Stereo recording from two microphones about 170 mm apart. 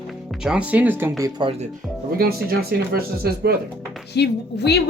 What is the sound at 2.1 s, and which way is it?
Speech, 65° right (ahead or behind).